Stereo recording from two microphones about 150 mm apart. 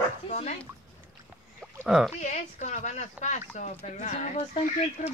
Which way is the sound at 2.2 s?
55° left (ahead or behind).